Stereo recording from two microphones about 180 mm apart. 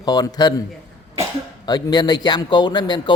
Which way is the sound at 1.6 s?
20° left (ahead or behind).